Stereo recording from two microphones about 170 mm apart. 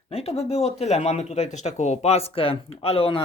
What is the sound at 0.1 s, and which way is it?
Speech, 35° left (ahead or behind).